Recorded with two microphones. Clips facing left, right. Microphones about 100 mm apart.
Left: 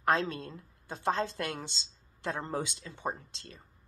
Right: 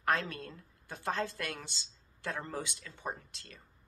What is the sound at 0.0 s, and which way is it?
Speech, 25° left (ahead or behind).